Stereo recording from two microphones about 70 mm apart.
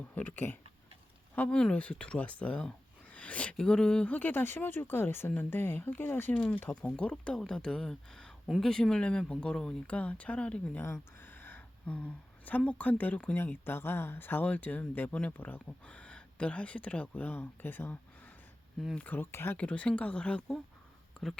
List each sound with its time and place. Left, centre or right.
0.1 s speech: left
1.4 s speech: centre
4.1 s speech: left; by 9.7 s centre
9.8 s speech: centre
10.8 s speech: left
11.3 s a sound: left
13.3 s speech: left
15.9 s speech: centre
18.9 s speech: left
19.5 s speech: centre